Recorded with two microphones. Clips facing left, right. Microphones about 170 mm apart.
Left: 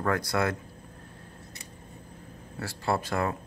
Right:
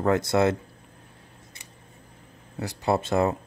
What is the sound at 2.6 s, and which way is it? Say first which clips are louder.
Speech: right 4 dB; 20° right (ahead or behind).